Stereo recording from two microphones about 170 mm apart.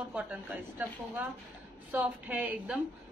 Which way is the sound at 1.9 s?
5° right (ahead or behind).